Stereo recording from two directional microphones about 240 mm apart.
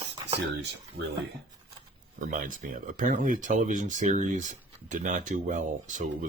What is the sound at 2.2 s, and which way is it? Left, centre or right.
Speech, right.